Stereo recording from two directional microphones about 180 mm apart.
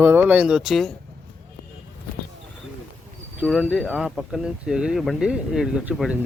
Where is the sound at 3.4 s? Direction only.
Centre (ahead or behind).